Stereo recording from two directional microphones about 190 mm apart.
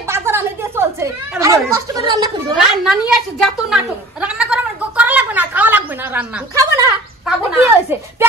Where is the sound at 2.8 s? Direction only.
5° right (ahead or behind).